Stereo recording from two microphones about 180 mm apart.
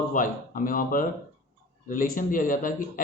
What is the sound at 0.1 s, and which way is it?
A man's voice, 50° left (ahead or behind).